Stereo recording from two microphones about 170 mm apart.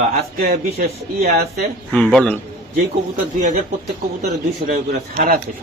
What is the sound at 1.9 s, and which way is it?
Speech, 5° left (ahead or behind).